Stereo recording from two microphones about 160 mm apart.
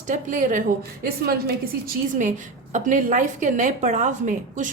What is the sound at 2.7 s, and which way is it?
A woman's voice, 55° right (ahead or behind).